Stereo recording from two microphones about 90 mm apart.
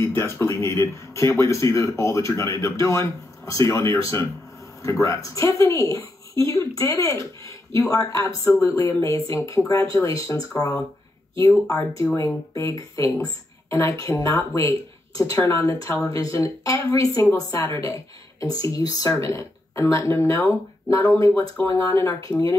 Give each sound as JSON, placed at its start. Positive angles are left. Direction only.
{"t": 0.0, "sound": "a child's voice", "side_deg": 25}
{"t": 11.6, "sound": "speech", "side_deg": 35}